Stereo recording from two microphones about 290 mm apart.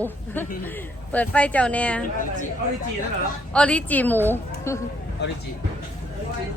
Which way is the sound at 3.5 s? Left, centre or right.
Centre.